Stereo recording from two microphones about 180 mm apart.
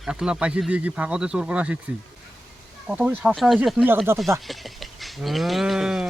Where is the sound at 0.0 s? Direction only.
5° right (ahead or behind).